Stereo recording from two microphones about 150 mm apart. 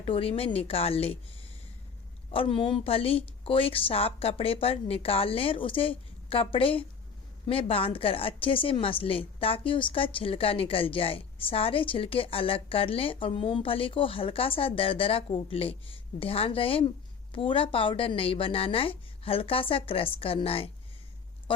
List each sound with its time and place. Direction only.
0.0 s a woman's voice: 40° left (ahead or behind)